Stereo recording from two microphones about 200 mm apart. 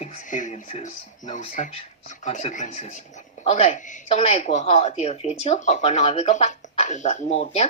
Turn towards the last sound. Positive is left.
turn(degrees=30)  # may be behind; listen again after turning